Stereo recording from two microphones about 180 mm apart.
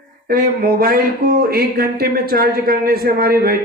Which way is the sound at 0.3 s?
55° right (ahead or behind).